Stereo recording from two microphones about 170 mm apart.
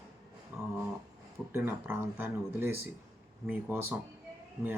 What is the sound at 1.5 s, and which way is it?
Speech, 15° right (ahead or behind).